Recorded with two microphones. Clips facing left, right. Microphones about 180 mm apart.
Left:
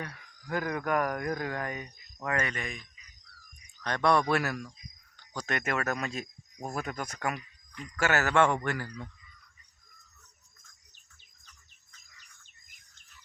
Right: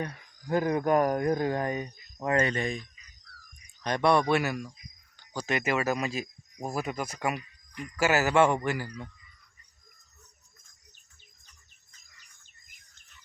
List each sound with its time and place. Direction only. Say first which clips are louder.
0.0 s speech: right 6 dB; 25° right (ahead or behind)
3.8 s speech: right 2 dB; 15° right (ahead or behind)